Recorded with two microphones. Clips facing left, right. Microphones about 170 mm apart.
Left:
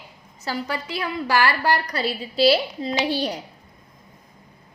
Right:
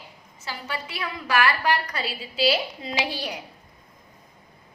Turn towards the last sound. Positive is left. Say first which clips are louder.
# left 6 dB
turn(degrees=30)  # may be behind; listen again after turning